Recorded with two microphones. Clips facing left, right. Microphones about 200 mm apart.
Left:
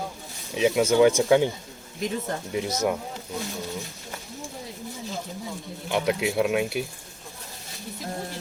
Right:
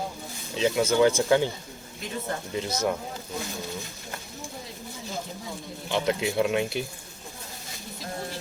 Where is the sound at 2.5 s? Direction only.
15° left (ahead or behind).